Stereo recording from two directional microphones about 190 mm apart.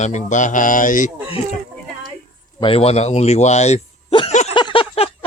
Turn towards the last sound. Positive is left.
turn(degrees=25)  # may be behind; listen again after turning